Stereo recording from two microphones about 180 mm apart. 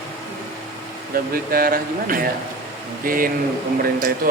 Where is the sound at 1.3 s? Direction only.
55° right (ahead or behind).